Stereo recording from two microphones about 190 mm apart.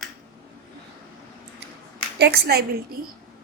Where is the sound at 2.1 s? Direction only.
60° right (ahead or behind).